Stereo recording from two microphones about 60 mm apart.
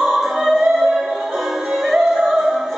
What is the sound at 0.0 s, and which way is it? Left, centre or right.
Music, centre.